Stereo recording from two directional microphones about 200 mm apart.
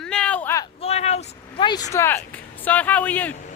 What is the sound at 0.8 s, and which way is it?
Vehicle, 30° left (ahead or behind).